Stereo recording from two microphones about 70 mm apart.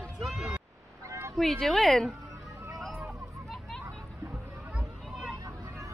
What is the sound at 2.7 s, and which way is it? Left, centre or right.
Vehicle, centre.